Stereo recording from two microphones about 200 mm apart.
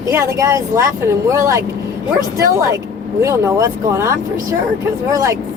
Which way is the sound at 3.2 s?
15° right (ahead or behind).